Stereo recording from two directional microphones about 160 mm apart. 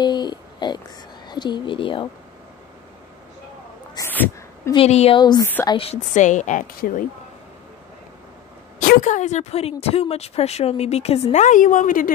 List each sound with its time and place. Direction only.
0.0 s a sound: 25° left (ahead or behind)
3.9 s a sound: 15° left (ahead or behind)
4.7 s a woman's voice: 40° left (ahead or behind)
5.2 s a woman's voice: 25° left (ahead or behind)
6.1 s speech: 50° left (ahead or behind)
8.8 s a woman's voice: 50° left (ahead or behind)